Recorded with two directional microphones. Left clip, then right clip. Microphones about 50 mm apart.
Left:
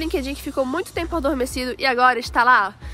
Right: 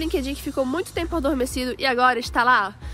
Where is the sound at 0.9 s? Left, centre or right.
Left.